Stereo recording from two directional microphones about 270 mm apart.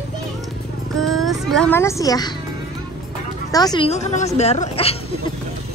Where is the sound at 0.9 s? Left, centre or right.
Centre.